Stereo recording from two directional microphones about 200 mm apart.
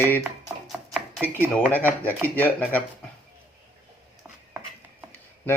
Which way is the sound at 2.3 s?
10° left (ahead or behind).